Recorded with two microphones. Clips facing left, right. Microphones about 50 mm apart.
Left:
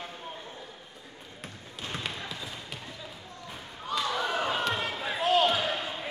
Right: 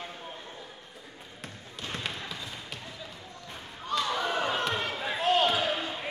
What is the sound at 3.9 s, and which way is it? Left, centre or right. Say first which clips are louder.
Basketball bounce: right 1 dB; centre.